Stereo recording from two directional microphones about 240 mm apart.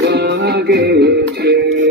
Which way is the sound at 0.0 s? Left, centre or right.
Right.